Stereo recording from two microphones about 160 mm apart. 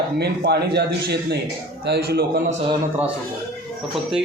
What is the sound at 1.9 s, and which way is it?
Speech, 80° right.